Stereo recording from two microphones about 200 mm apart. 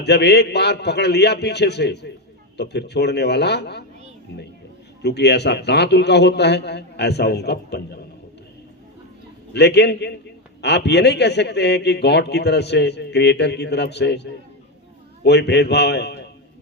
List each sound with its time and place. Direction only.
0.0 s a man's voice: 55° left (ahead or behind)
5.0 s a man's voice: 55° left (ahead or behind)
9.5 s a man's voice: 55° left (ahead or behind)